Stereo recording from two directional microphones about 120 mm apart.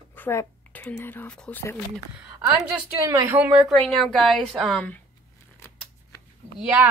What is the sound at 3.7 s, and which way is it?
A woman's voice, 5° left (ahead or behind).